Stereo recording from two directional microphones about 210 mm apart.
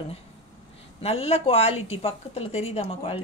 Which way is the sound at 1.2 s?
30° left (ahead or behind).